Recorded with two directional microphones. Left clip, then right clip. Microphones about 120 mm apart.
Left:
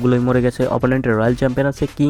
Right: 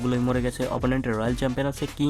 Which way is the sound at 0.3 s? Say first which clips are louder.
Left 9 dB; 35° left (ahead or behind).